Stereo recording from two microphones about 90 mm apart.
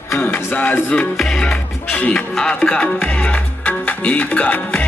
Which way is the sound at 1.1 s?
5° left (ahead or behind).